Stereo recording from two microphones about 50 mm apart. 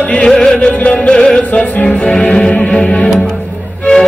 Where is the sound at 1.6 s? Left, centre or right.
Left.